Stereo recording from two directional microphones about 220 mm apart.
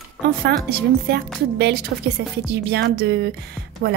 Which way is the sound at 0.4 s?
45° right (ahead or behind).